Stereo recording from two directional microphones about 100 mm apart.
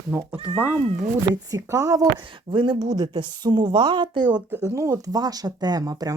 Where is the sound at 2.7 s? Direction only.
40° right (ahead or behind).